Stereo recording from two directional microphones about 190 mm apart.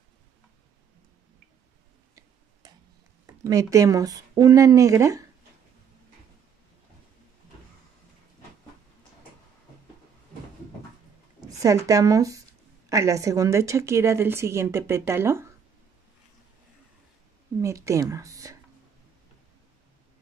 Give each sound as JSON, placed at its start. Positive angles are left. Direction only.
{"t": 3.4, "sound": "a woman's voice", "side_deg": -15}
{"t": 11.6, "sound": "a woman's voice", "side_deg": -15}
{"t": 17.6, "sound": "speech", "side_deg": -15}